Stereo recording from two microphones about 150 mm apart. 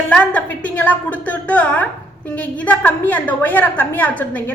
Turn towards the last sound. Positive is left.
turn(degrees=10)  # may be behind; listen again after turning